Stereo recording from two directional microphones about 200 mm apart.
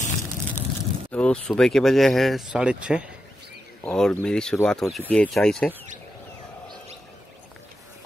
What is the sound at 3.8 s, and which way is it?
Speech, 5° left (ahead or behind).